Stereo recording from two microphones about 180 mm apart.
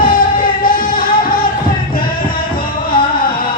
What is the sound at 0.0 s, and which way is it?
Music, 50° left (ahead or behind).